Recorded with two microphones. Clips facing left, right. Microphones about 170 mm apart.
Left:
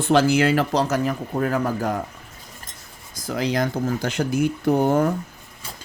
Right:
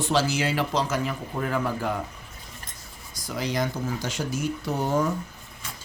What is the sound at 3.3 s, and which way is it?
Speech, 50° left (ahead or behind).